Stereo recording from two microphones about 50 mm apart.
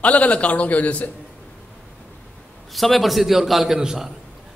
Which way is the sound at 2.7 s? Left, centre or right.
Centre.